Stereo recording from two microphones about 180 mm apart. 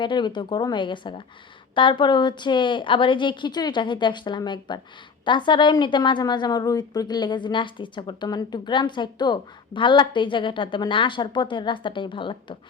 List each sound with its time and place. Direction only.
0.0 s a woman's voice: 25° left (ahead or behind)